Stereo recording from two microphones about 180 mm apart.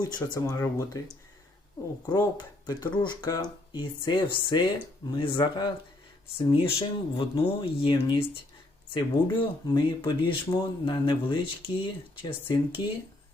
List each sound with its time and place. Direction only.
0.0 s speech: 20° left (ahead or behind)
2.0 s speech: 25° left (ahead or behind)